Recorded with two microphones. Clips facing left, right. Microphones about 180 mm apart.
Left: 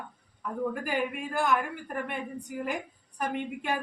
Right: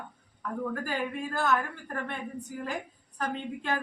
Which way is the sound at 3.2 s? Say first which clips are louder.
Left 1 dB; 15° left (ahead or behind).